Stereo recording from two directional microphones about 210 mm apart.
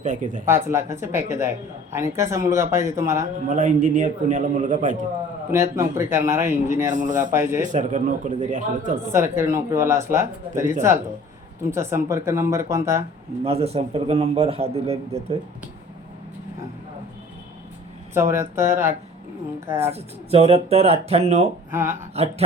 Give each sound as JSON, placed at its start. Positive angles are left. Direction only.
{"t": 0.0, "sound": "a man's voice", "side_deg": -35}
{"t": 0.4, "sound": "a man's voice", "side_deg": -10}
{"t": 3.5, "sound": "a man's voice", "side_deg": -40}
{"t": 5.5, "sound": "a man's voice", "side_deg": -15}
{"t": 6.9, "sound": "a man's voice", "side_deg": -35}
{"t": 7.2, "sound": "a man's voice", "side_deg": -10}
{"t": 7.7, "sound": "a man's voice", "side_deg": -35}
{"t": 9.1, "sound": "a man's voice", "side_deg": -10}
{"t": 11.7, "sound": "a man's voice", "side_deg": -10}
{"t": 13.4, "sound": "a man's voice", "side_deg": -30}
{"t": 18.1, "sound": "a man's voice", "side_deg": -10}
{"t": 19.8, "sound": "a man's voice", "side_deg": -30}
{"t": 21.7, "sound": "a man's voice", "side_deg": -10}
{"t": 22.1, "sound": "a man's voice", "side_deg": -30}